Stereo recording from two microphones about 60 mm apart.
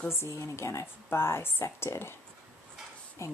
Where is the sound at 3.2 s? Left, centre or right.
Left.